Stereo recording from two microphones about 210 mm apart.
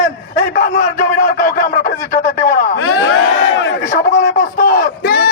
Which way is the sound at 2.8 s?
80° left.